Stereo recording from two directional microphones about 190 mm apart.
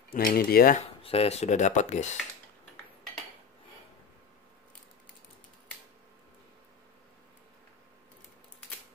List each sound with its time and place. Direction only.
0.1 s cutlery: 50° left (ahead or behind)
0.7 s speech: 30° left (ahead or behind)